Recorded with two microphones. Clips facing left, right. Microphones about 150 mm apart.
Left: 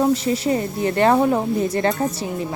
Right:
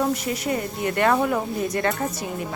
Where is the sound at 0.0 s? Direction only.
30° left (ahead or behind).